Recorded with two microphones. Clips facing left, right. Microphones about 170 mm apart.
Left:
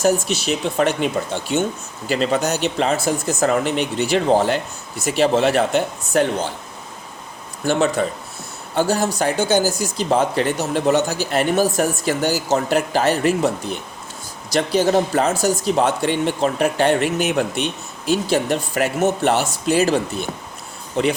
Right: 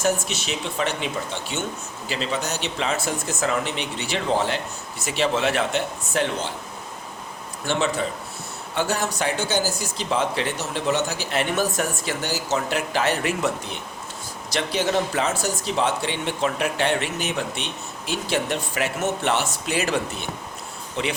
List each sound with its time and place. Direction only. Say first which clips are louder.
0.0 s speech: left 6 dB; 35° left (ahead or behind)
7.6 s speech: left 6 dB; 45° left (ahead or behind)